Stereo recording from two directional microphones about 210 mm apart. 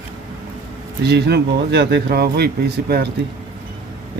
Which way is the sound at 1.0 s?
50° right (ahead or behind).